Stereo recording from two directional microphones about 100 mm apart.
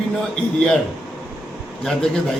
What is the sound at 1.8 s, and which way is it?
Speech, 5° left (ahead or behind).